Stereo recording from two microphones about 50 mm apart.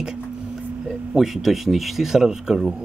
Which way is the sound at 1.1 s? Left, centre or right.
Centre.